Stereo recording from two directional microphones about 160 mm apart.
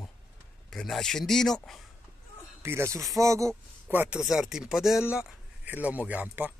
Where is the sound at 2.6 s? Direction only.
15° right (ahead or behind).